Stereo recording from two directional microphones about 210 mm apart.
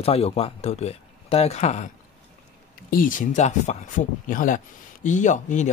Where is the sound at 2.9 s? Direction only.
40° left (ahead or behind).